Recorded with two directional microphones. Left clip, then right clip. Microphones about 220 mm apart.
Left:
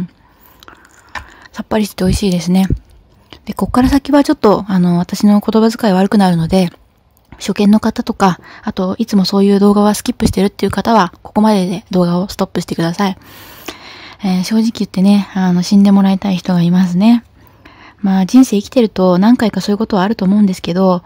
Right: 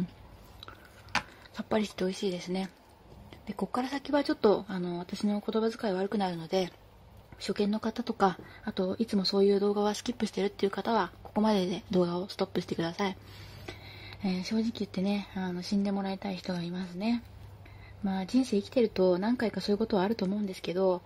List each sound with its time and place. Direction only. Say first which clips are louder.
1.3 s speech: left 14 dB; 40° left (ahead or behind)